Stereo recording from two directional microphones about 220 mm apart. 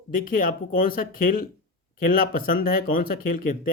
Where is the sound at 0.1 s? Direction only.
40° left (ahead or behind).